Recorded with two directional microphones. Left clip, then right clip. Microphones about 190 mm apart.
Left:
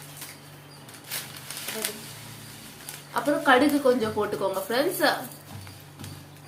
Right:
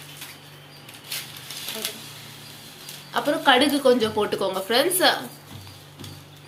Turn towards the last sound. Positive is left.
turn(degrees=-20)  # may be behind; listen again after turning